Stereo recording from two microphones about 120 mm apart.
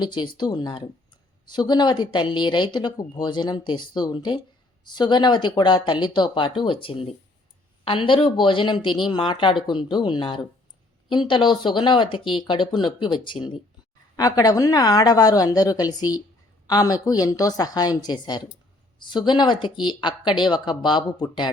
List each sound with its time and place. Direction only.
0.0 s speech: 40° left (ahead or behind)
14.2 s speech: 30° left (ahead or behind)